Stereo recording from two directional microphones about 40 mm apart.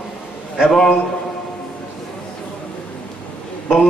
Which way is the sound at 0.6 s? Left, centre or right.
Centre.